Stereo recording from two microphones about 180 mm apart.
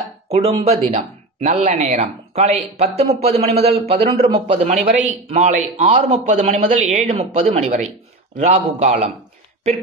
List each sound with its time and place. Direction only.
0.3 s speech: 35° right (ahead or behind)